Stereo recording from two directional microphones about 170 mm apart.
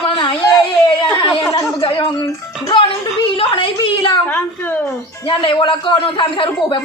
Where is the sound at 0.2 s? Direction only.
25° left (ahead or behind).